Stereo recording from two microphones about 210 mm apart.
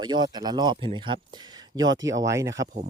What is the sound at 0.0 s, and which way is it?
Speech, 20° right (ahead or behind).